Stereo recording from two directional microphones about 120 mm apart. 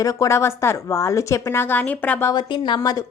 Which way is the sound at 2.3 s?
40° left (ahead or behind).